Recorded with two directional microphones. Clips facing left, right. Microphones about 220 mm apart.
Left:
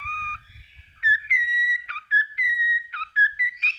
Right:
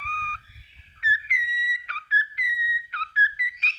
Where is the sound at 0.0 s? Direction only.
40° right (ahead or behind).